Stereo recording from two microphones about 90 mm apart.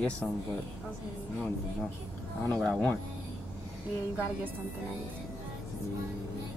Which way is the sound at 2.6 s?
15° left (ahead or behind).